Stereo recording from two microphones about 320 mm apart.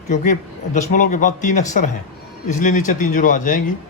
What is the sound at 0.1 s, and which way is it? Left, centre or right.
Speech, left.